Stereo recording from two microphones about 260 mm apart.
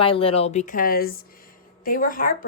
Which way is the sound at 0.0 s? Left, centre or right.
Left.